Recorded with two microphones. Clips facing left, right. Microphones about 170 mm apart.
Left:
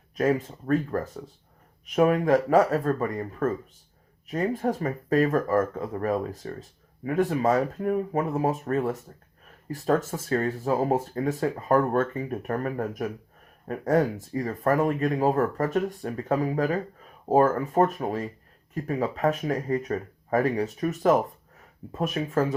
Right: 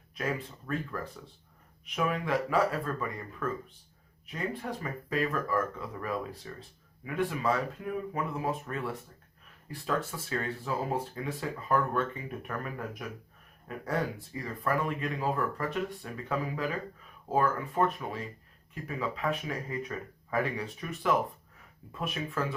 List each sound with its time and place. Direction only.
0.2 s speech: 45° left (ahead or behind)